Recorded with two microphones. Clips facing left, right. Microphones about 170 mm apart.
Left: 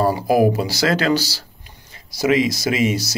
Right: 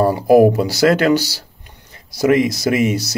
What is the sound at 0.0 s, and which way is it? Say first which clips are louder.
Speech: right 5 dB; 55° right (ahead or behind).